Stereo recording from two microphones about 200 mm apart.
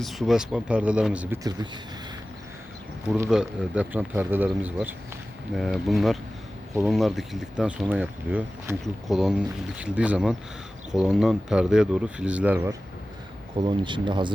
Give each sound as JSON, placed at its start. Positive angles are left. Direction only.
{"t": 0.0, "sound": "speech", "side_deg": 0}
{"t": 3.2, "sound": "speech", "side_deg": -5}
{"t": 13.6, "sound": "speech", "side_deg": -25}